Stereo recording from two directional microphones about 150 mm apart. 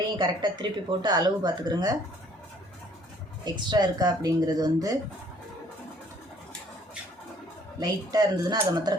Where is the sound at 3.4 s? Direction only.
30° right (ahead or behind).